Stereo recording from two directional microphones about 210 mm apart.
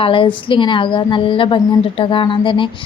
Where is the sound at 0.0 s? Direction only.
25° left (ahead or behind).